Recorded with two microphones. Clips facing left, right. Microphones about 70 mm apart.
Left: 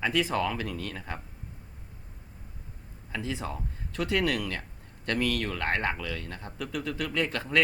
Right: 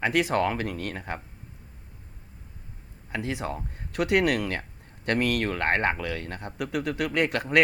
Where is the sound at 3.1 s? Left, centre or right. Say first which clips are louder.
Right 3 dB; right.